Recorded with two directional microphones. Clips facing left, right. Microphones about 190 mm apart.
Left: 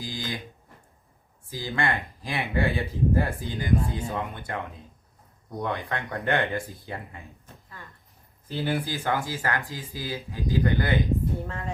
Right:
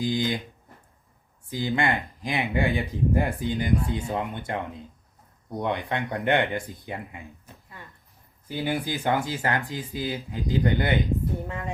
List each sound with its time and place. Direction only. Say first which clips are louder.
0.0 s speech: right 8 dB; 20° right (ahead or behind)
1.5 s speech: right 3 dB; 20° right (ahead or behind)